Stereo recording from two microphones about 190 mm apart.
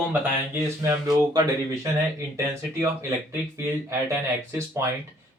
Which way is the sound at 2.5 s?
15° right (ahead or behind).